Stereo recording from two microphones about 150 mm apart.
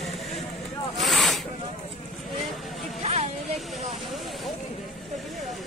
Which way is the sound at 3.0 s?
45° right (ahead or behind).